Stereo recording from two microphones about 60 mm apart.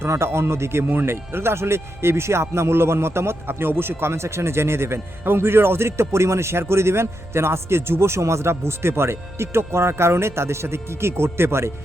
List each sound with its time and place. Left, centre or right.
0.0 s speech: right